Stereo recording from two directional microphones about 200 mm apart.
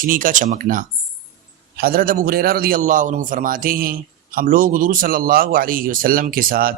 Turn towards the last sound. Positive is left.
turn(degrees=-45)  # may be behind; listen again after turning